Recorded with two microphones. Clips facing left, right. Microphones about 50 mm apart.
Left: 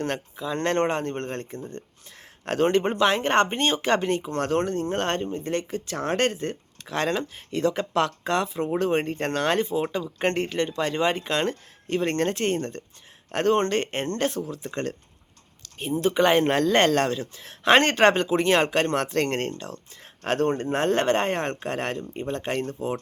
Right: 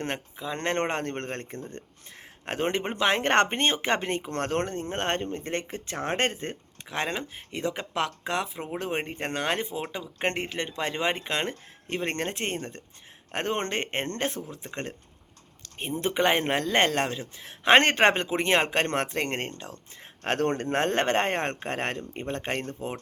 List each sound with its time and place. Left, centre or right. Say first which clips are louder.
0.0 s speech: left 4 dB; right
0.9 s speech: left 3 dB; right
2.4 s speech: left 7 dB; right
3.2 s speech: left 1 dB; right
3.6 s speech: left 3 dB; right
5.2 s speech: left 3 dB; right
6.8 s speech: left 5 dB; centre
15.6 s speech: left 5 dB; right
16.4 s speech: left 4 dB; centre; by 19.1 s right
19.1 s speech: left 5 dB; centre
20.0 s speech: left 2 dB; right
20.7 s speech: left 2 dB; right